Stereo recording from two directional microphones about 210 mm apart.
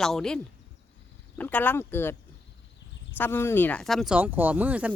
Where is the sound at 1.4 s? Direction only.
10° left (ahead or behind).